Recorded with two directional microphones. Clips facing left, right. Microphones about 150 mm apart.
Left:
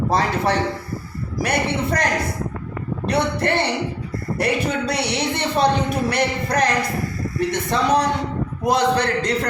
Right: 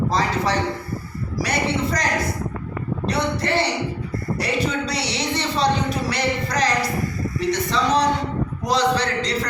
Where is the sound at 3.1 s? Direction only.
55° left (ahead or behind).